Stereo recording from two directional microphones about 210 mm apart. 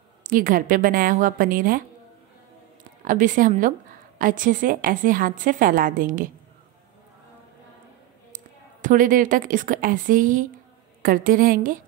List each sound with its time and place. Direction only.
0.2 s a woman's voice: 40° right (ahead or behind)
3.0 s a woman's voice: 40° right (ahead or behind)
8.8 s a woman's voice: 40° right (ahead or behind)